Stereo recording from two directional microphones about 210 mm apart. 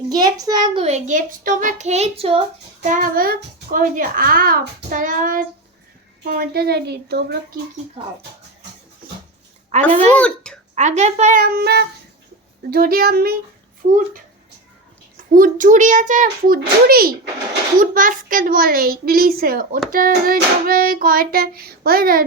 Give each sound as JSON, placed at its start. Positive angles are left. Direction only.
{"t": 0.1, "sound": "a child's voice", "side_deg": -15}
{"t": 2.8, "sound": "a child's voice", "side_deg": -40}
{"t": 6.2, "sound": "child singing", "side_deg": -45}
{"t": 8.0, "sound": "a child's voice", "side_deg": -30}
{"t": 10.2, "sound": "speech", "side_deg": 5}
{"t": 10.8, "sound": "a child's voice", "side_deg": -35}
{"t": 12.7, "sound": "child singing", "side_deg": -45}
{"t": 15.4, "sound": "a child's voice", "side_deg": -40}
{"t": 17.7, "sound": "child singing", "side_deg": -40}